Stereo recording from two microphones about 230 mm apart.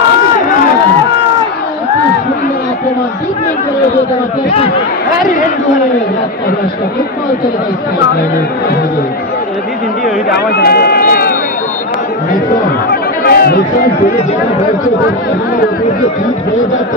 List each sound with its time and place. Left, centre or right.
0.4 s a sound: left
5.2 s a man's voice: left
10.3 s speech: left
12.9 s chatter: left